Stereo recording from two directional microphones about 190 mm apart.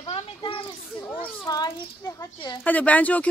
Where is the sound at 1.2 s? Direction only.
20° left (ahead or behind).